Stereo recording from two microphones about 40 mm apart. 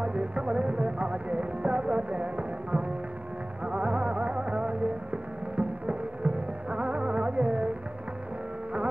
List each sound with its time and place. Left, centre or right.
0.0 s music: right